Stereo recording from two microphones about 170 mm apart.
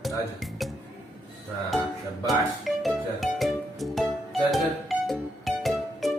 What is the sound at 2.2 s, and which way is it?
Music, centre (ahead or behind).